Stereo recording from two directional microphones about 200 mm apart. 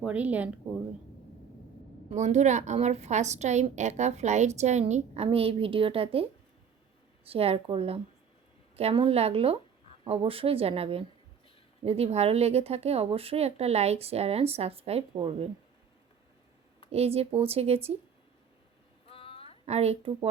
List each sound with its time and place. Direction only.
0.0 s speech: 5° right (ahead or behind)
2.0 s a woman's voice: 35° right (ahead or behind)
7.3 s a woman's voice: 30° right (ahead or behind)
16.9 s a woman's voice: 30° right (ahead or behind)
19.0 s a sound: 30° left (ahead or behind)
19.6 s a woman's voice: 30° right (ahead or behind)